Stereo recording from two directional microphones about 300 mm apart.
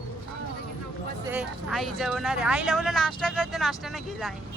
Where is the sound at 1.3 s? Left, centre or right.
Centre.